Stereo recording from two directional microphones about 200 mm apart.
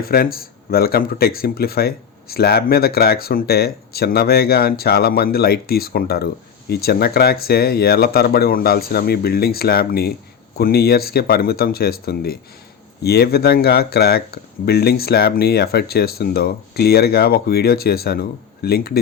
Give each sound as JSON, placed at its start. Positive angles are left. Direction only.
{"t": 0.0, "sound": "speech", "side_deg": 50}